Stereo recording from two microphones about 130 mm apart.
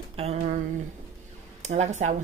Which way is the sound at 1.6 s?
60° right (ahead or behind).